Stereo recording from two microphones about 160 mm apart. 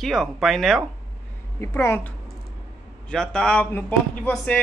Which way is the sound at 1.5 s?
15° left (ahead or behind).